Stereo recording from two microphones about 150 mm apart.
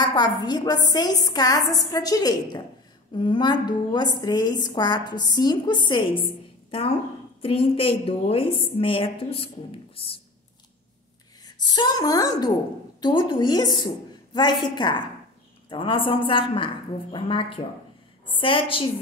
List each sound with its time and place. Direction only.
0.0 s a woman's voice: 25° left (ahead or behind)
7.4 s a woman's voice: 35° left (ahead or behind)
11.4 s a woman's voice: 30° left (ahead or behind)